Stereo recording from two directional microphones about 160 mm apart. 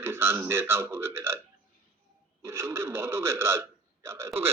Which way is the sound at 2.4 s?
15° right (ahead or behind).